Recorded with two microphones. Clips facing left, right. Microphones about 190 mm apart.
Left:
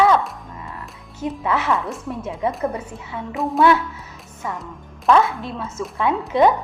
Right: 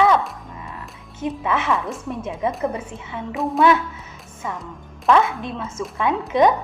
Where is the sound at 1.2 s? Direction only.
20° right (ahead or behind).